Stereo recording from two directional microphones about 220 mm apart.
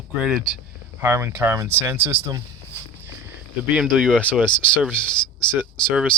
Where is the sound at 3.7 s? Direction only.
5° right (ahead or behind).